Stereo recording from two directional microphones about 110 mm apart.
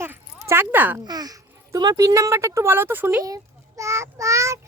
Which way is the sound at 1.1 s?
35° right (ahead or behind).